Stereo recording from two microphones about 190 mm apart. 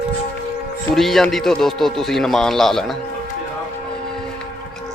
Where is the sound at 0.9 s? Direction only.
Centre (ahead or behind).